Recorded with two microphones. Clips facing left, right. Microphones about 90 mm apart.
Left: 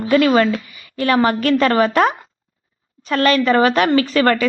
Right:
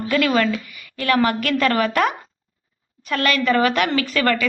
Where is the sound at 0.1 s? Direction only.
30° left (ahead or behind).